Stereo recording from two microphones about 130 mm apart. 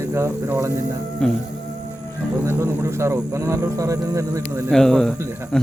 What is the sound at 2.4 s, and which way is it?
Speech, 20° right (ahead or behind).